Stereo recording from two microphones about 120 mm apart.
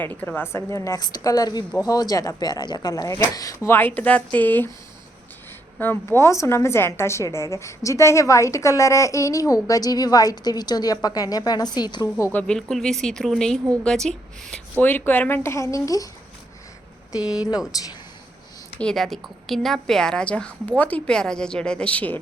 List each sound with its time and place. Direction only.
0.0 s speech: 15° left (ahead or behind)
5.8 s a woman's voice: 20° left (ahead or behind); by 12.0 s 35° left (ahead or behind)
12.2 s a woman's voice: 15° left (ahead or behind)
17.2 s speech: 10° right (ahead or behind)
18.8 s a woman's voice: 5° left (ahead or behind)